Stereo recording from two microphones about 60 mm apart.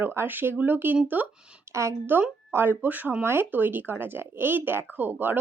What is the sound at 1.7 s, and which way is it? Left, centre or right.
Speech, right.